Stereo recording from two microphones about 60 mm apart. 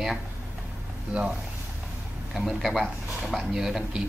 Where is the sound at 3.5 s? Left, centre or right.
Centre.